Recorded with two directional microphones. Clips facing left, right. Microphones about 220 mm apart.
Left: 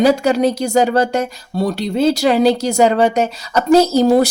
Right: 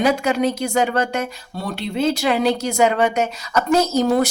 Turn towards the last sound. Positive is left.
turn(degrees=35)  # may be behind; listen again after turning